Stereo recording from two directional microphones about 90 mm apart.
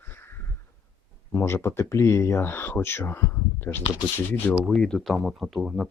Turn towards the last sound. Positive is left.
turn(degrees=-5)  # may be behind; listen again after turning